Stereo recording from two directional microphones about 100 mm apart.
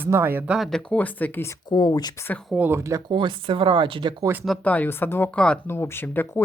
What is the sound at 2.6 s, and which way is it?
Speech, 25° right (ahead or behind).